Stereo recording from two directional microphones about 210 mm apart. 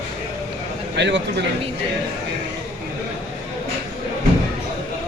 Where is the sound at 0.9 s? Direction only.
55° right (ahead or behind).